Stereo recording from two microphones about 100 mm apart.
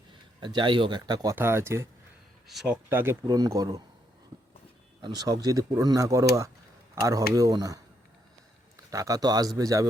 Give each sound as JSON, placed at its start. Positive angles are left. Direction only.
{"t": 0.3, "sound": "speech", "side_deg": -50}
{"t": 1.4, "sound": "speech", "side_deg": -25}
{"t": 2.5, "sound": "speech", "side_deg": 0}
{"t": 2.9, "sound": "speech", "side_deg": -20}
{"t": 3.2, "sound": "speech", "side_deg": -40}
{"t": 5.0, "sound": "speech", "side_deg": -40}
{"t": 8.9, "sound": "speech", "side_deg": -35}